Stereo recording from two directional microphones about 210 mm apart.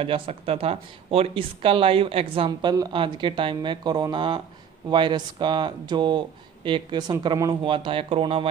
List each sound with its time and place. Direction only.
0.0 s speech: 25° right (ahead or behind)